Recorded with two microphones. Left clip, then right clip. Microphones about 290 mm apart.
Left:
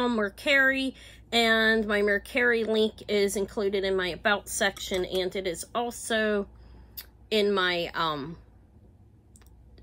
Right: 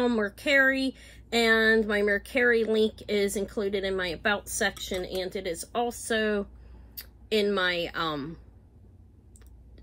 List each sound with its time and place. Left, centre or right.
0.0 s a woman's voice: centre